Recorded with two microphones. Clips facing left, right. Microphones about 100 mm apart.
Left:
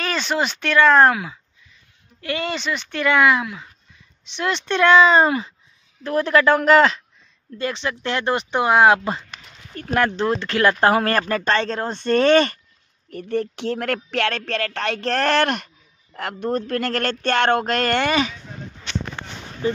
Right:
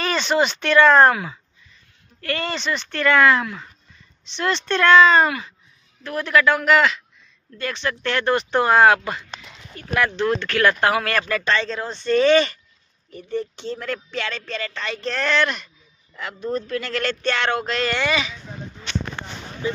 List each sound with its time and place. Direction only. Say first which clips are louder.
0.0 s a woman's voice: right 3 dB; centre (ahead or behind); by 7.0 s 35° left (ahead or behind)
7.5 s speech: left 1 dB; 20° left (ahead or behind)
9.8 s speech: left 2 dB; 40° left (ahead or behind)
10.2 s speech: even; 25° left (ahead or behind); by 12.5 s 50° left (ahead or behind)
13.1 s speech: left 3 dB; 70° left (ahead or behind); by 18.3 s 50° left (ahead or behind)